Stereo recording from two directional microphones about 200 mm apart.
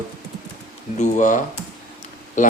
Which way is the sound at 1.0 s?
40° left (ahead or behind).